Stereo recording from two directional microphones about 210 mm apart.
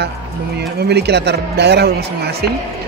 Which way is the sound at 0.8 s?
50° right (ahead or behind).